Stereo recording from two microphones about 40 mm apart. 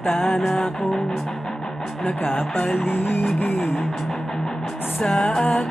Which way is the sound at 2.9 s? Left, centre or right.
Left.